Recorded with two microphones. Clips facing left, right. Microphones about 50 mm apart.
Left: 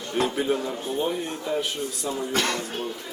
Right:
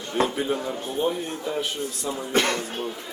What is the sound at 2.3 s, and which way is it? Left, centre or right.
Speech, right.